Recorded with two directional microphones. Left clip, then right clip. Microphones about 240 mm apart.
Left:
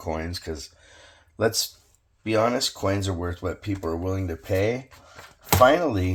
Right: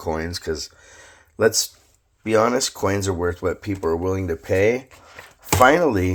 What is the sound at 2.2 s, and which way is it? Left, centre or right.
Speech, right.